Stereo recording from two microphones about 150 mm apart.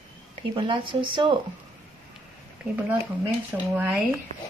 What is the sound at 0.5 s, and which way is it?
Speech, 35° right (ahead or behind).